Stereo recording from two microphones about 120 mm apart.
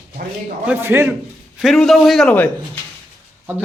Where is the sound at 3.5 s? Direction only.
15° right (ahead or behind).